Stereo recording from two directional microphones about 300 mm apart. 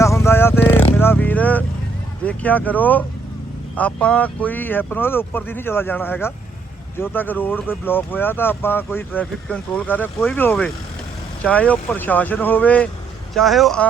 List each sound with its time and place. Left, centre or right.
0.0 s vehicle: centre
2.2 s speech: centre